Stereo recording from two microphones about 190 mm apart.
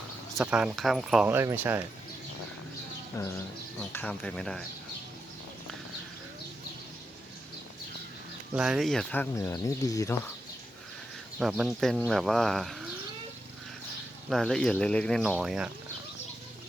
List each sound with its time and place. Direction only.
0.3 s speech: 5° right (ahead or behind)
3.2 s speech: 15° left (ahead or behind)
8.5 s speech: 5° right (ahead or behind); by 10.2 s 15° left (ahead or behind)
11.3 s speech: centre (ahead or behind)
14.3 s speech: centre (ahead or behind)